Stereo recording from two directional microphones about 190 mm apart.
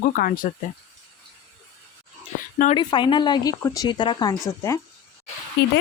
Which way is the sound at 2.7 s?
25° left (ahead or behind).